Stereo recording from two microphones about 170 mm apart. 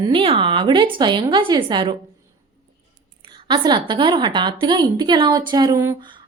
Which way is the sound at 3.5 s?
25° right (ahead or behind).